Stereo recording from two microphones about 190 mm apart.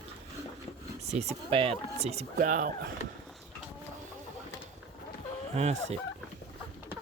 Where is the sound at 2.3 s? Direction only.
45° right (ahead or behind).